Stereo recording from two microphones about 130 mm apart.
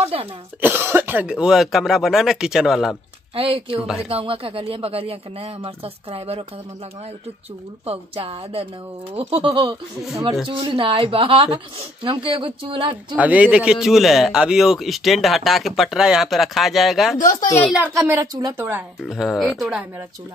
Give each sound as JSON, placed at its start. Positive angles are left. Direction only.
{"t": 0.0, "sound": "speech", "side_deg": -45}
{"t": 0.6, "sound": "a man's voice", "side_deg": -15}
{"t": 3.3, "sound": "speech", "side_deg": -45}
{"t": 7.8, "sound": "speech", "side_deg": -50}
{"t": 13.2, "sound": "a man's voice", "side_deg": -10}
{"t": 17.4, "sound": "a child's voice", "side_deg": 20}
{"t": 18.2, "sound": "speech", "side_deg": -30}
{"t": 18.6, "sound": "speech", "side_deg": -15}
{"t": 19.0, "sound": "a man's voice", "side_deg": 0}